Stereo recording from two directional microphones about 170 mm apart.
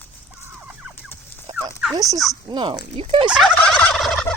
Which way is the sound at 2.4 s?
30° right (ahead or behind).